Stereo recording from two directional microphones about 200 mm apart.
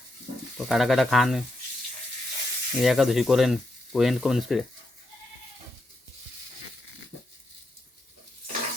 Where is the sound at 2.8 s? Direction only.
Centre (ahead or behind).